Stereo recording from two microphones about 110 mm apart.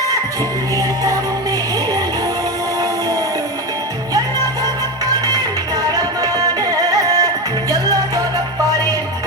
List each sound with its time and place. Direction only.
5.9 s music: 30° right (ahead or behind)